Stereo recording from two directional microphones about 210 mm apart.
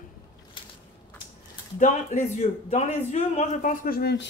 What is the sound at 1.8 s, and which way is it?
A man's voice, 35° left (ahead or behind).